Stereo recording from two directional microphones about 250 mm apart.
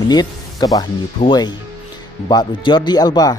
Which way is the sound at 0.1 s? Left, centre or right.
Centre.